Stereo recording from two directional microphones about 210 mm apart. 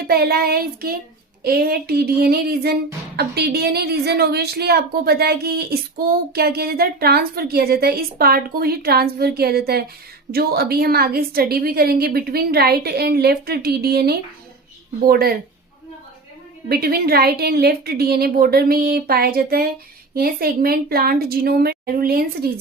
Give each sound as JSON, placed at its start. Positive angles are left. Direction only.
{"t": 0.0, "sound": "a woman's voice", "side_deg": -45}
{"t": 16.6, "sound": "a woman's voice", "side_deg": -45}